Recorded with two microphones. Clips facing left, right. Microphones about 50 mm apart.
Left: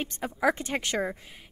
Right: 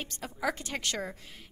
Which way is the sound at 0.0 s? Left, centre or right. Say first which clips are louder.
Left 7 dB; left.